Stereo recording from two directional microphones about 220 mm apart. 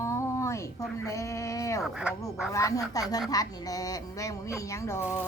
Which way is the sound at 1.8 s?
5° right (ahead or behind).